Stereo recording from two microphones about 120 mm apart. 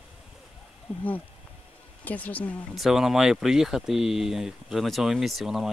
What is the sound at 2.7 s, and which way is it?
Speech, centre (ahead or behind).